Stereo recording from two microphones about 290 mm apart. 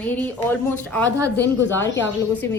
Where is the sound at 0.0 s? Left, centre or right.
Centre.